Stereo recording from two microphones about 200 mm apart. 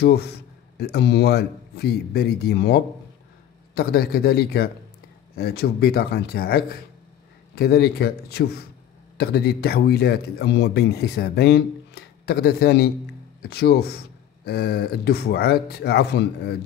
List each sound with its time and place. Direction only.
0.0 s speech: 55° left (ahead or behind)